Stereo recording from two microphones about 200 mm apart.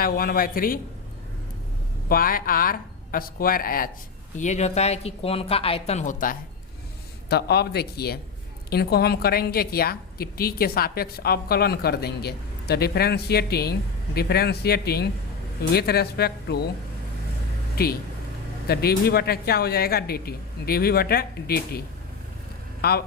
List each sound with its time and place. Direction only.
0.0 s a woman's voice: 45° left (ahead or behind)
2.0 s a woman's voice: 45° left (ahead or behind)
7.3 s a woman's voice: 55° left (ahead or behind)
18.7 s a woman's voice: 50° left (ahead or behind)
22.8 s a woman's voice: 50° left (ahead or behind)